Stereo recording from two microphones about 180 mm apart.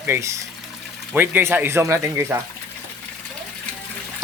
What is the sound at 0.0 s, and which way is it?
Speech, 15° right (ahead or behind).